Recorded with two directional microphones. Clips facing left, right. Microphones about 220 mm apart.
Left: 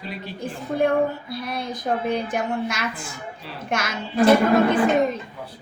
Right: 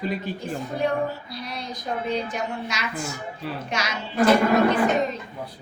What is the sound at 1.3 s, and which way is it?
A woman's voice, 55° left (ahead or behind).